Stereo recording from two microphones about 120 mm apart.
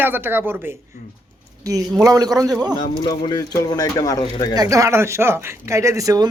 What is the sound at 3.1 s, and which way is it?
A man's voice, 30° left (ahead or behind).